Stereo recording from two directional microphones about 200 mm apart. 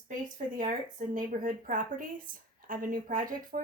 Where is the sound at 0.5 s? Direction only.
40° right (ahead or behind).